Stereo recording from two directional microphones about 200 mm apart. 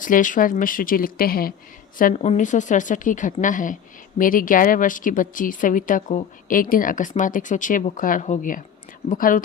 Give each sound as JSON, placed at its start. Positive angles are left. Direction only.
{"t": 0.0, "sound": "a woman's voice", "side_deg": 40}